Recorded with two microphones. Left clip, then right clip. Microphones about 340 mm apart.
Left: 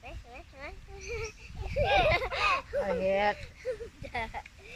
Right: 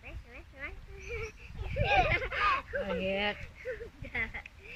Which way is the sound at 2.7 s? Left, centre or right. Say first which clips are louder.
Left 4 dB; left.